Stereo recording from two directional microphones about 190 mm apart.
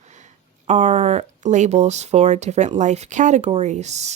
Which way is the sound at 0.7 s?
35° right (ahead or behind).